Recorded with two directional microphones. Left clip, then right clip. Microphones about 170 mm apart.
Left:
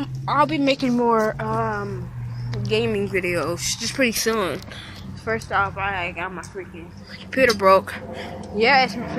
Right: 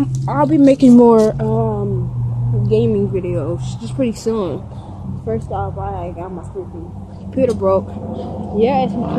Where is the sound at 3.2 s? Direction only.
65° left (ahead or behind).